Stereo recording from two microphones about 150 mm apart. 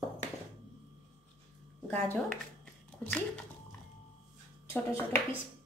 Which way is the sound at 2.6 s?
5° left (ahead or behind).